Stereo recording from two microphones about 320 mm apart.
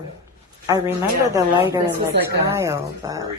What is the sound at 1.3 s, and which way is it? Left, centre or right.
Speech, centre.